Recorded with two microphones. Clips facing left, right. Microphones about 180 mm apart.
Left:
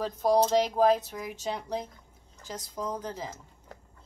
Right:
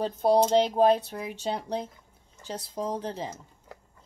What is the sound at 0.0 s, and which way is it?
Speech, 30° right (ahead or behind).